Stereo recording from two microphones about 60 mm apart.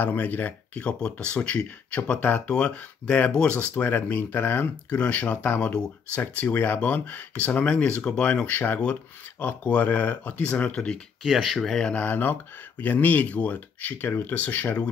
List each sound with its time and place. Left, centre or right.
0.0 s speech: left
0.8 s speech: centre
2.1 s speech: left
2.5 s speech: left
3.8 s speech: left
4.8 s speech: left
7.7 s speech: centre; by 10.5 s left
10.5 s speech: centre
11.2 s speech: centre
11.9 s speech: left